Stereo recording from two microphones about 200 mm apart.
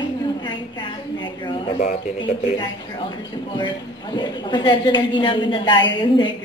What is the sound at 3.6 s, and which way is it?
A woman's voice, 20° left (ahead or behind).